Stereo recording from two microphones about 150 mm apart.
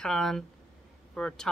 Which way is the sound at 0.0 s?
5° left (ahead or behind).